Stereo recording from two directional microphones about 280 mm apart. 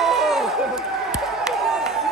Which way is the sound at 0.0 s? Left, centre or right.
Centre.